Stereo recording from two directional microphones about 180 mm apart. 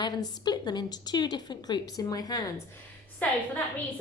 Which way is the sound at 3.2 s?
10° left (ahead or behind).